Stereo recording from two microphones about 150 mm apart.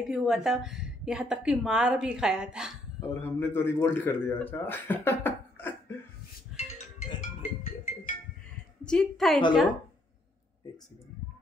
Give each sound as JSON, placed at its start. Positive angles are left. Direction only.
{"t": 0.1, "sound": "a woman's voice", "side_deg": -5}
{"t": 3.0, "sound": "a man's voice", "side_deg": 15}
{"t": 6.5, "sound": "music", "side_deg": -5}
{"t": 7.2, "sound": "music", "side_deg": 60}
{"t": 8.8, "sound": "a woman's voice", "side_deg": 5}